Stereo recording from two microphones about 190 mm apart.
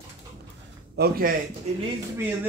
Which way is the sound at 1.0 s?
50° right (ahead or behind).